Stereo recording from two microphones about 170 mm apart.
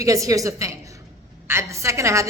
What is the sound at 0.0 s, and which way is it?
A woman's voice, 20° right (ahead or behind).